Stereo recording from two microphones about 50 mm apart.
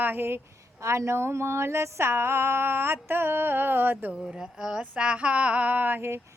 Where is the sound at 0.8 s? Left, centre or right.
Right.